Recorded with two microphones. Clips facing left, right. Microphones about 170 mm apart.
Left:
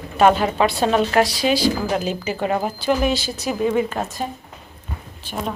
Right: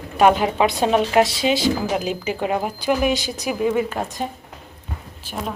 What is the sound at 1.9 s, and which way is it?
A woman's voice, 10° right (ahead or behind).